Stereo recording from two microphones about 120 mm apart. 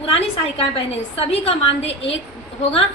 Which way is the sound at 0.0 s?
55° left (ahead or behind).